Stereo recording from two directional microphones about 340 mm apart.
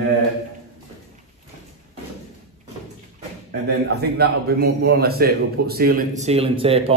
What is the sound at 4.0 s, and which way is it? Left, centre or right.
A man's voice, right.